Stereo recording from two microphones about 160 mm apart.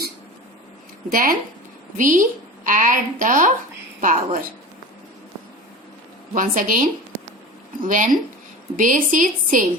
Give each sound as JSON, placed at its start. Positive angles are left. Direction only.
{"t": 1.1, "sound": "a woman's voice", "side_deg": -60}
{"t": 6.3, "sound": "a woman's voice", "side_deg": -55}